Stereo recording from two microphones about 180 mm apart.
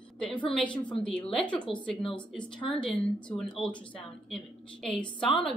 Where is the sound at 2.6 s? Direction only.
5° left (ahead or behind).